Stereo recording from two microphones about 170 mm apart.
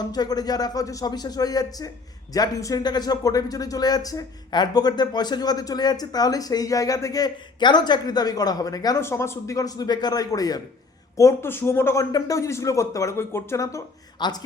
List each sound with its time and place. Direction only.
0.1 s speech: 25° left (ahead or behind)